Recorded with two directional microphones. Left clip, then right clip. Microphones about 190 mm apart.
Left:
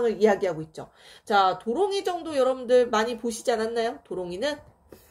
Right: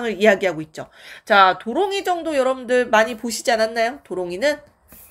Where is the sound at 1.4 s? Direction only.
20° right (ahead or behind).